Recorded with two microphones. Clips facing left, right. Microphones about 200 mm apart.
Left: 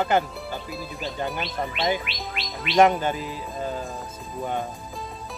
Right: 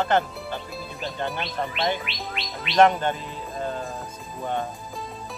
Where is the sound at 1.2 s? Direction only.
5° left (ahead or behind).